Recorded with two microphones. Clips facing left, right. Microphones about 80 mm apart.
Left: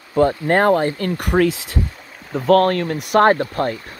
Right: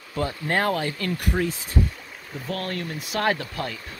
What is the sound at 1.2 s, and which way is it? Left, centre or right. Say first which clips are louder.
Speech: left 11 dB; left.